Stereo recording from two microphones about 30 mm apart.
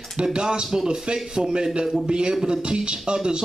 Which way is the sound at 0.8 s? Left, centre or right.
Right.